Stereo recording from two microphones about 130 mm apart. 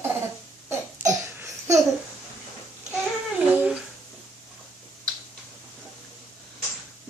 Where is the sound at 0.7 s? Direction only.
15° right (ahead or behind).